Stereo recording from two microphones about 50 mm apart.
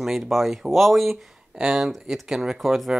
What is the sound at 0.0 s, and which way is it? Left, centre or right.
Speech, centre.